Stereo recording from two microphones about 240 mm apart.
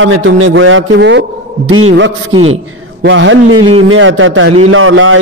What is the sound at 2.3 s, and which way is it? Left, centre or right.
Speech, right.